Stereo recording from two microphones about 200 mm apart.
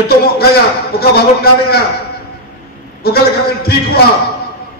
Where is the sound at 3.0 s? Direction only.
50° left (ahead or behind).